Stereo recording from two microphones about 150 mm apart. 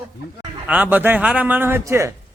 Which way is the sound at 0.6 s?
10° right (ahead or behind).